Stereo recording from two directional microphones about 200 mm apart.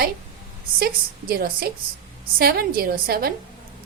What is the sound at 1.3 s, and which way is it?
A woman's voice, 50° right (ahead or behind).